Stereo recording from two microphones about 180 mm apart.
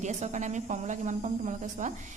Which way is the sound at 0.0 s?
40° right (ahead or behind).